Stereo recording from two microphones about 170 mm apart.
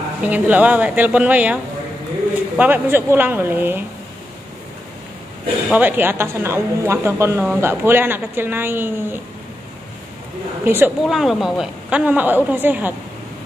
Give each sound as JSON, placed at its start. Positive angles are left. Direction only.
{"t": 0.2, "sound": "a woman's voice", "side_deg": -10}
{"t": 5.7, "sound": "a woman's voice", "side_deg": -10}
{"t": 10.6, "sound": "a woman's voice", "side_deg": -15}
{"t": 11.1, "sound": "a woman's voice", "side_deg": 0}